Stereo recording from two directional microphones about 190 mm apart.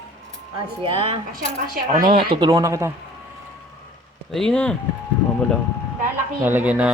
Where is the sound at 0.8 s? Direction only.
30° right (ahead or behind).